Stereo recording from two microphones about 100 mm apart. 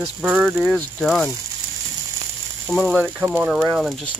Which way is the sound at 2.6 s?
10° left (ahead or behind).